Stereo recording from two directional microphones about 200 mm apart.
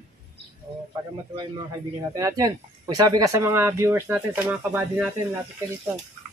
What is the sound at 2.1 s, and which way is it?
A man's voice, 15° right (ahead or behind).